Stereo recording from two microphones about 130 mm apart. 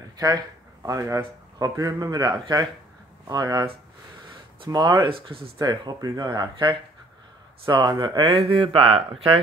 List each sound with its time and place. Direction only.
0.8 s speech: 25° right (ahead or behind)
8.0 s speech: 40° right (ahead or behind)